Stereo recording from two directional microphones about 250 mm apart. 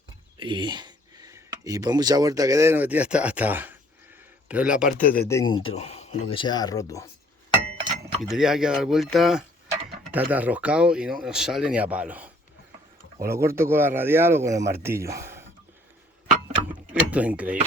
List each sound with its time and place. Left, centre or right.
0.3 s speech: centre
4.9 s speech: left
5.3 s speech: centre
8.2 s speech: centre
16.9 s speech: centre